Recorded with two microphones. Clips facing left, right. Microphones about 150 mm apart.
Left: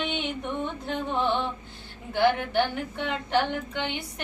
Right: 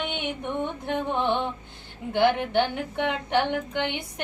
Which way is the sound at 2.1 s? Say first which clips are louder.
Right 2 dB; 20° right (ahead or behind).